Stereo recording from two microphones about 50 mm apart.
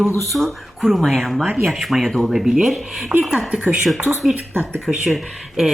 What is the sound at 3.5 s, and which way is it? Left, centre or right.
Speech, right.